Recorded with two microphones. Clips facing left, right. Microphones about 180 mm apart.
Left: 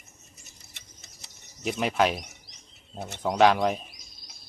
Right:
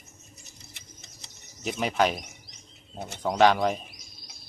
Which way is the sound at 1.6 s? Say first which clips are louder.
Left 1 dB; centre (ahead or behind).